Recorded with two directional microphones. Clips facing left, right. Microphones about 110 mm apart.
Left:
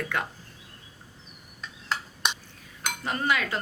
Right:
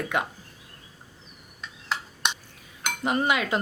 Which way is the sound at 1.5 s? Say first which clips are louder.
Even; centre (ahead or behind).